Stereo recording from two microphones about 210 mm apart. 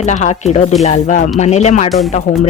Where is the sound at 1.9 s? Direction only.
Centre (ahead or behind).